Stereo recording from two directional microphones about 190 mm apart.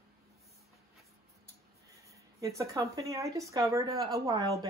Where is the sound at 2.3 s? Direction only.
15° right (ahead or behind).